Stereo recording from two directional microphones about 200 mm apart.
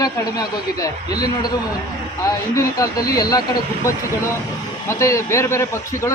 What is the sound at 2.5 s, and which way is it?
Speech, 15° left (ahead or behind).